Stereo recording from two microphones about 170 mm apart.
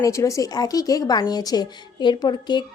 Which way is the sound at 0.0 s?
20° left (ahead or behind).